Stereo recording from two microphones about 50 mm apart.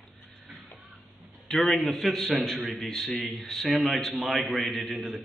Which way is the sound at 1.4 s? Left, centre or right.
Centre.